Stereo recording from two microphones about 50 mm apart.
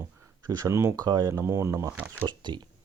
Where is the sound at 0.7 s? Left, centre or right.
Right.